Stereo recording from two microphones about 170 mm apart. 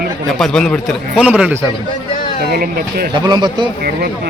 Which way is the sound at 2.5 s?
60° right (ahead or behind).